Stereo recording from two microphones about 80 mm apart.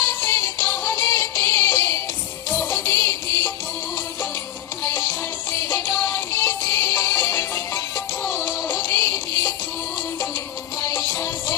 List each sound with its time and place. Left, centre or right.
0.3 s music: left
4.9 s music: left
10.8 s music: left